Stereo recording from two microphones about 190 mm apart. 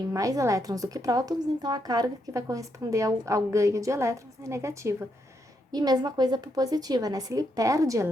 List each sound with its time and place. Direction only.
0.1 s a woman's voice: 15° right (ahead or behind)